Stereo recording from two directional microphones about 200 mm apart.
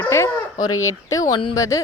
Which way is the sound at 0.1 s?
15° left (ahead or behind).